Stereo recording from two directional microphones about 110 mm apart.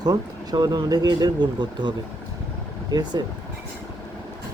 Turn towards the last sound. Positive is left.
turn(degrees=-40)  # may be behind; listen again after turning